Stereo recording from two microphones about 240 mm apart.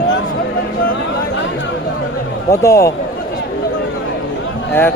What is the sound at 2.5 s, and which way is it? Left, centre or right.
Speech, centre.